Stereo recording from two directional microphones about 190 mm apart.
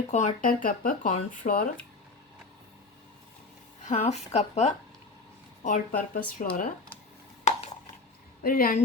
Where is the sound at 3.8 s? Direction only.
35° left (ahead or behind).